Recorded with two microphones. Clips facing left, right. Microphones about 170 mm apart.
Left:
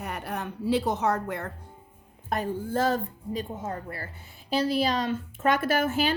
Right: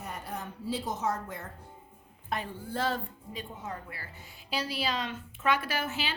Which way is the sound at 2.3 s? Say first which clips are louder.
Left 7 dB; 45° left (ahead or behind).